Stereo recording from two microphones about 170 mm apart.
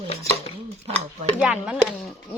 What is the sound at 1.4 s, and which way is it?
Speech, 5° right (ahead or behind).